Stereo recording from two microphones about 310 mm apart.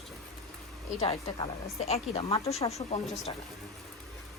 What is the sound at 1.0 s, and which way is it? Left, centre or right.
A woman's voice, centre.